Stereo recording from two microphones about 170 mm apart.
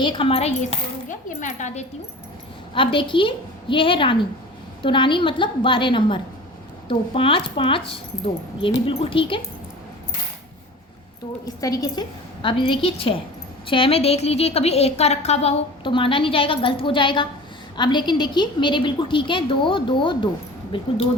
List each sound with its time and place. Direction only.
0.0 s a woman's voice: 30° left (ahead or behind); by 1.8 s 45° left (ahead or behind)
2.7 s a woman's voice: 30° left (ahead or behind)
11.4 s a woman's voice: 20° left (ahead or behind)